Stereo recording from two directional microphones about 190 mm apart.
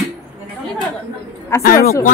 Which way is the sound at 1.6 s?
50° left (ahead or behind).